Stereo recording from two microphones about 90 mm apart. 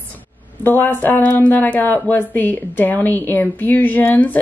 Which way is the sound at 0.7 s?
20° left (ahead or behind).